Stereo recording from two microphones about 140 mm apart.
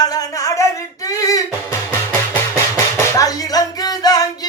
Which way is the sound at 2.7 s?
25° left (ahead or behind).